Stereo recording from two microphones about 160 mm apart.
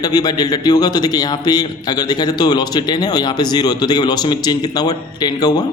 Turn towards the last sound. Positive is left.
turn(degrees=25)  # may be behind; listen again after turning